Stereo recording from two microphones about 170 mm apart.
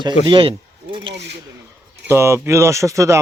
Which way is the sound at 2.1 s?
15° right (ahead or behind).